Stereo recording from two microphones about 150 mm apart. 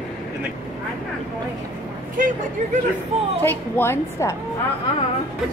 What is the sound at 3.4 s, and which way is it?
Speech, 15° left (ahead or behind).